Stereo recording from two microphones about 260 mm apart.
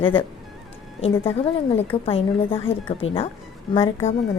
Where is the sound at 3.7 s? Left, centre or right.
Left.